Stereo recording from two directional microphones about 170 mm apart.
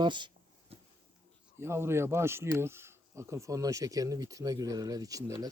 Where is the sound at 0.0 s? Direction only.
25° right (ahead or behind).